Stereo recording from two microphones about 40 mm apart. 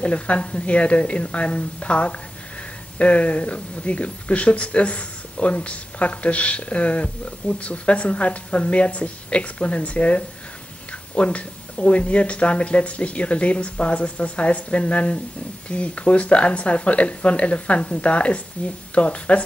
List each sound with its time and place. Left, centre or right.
0.0 s speech: left